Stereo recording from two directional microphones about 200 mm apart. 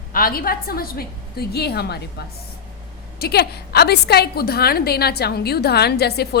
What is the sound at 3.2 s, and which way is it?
A woman's voice, 55° left (ahead or behind).